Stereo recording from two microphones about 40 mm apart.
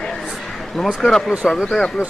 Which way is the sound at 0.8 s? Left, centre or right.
Centre.